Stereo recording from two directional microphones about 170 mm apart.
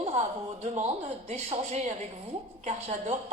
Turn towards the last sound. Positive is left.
turn(degrees=-40)  # may be behind; listen again after turning